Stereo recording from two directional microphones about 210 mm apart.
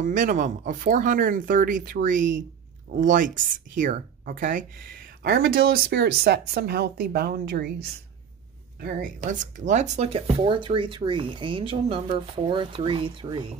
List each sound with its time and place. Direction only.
0.0 s speech: 40° right (ahead or behind)
8.8 s speech: 40° right (ahead or behind); by 13.5 s 25° right (ahead or behind)